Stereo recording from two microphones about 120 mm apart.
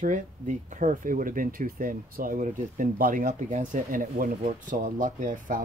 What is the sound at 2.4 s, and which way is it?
Speech, 90° right.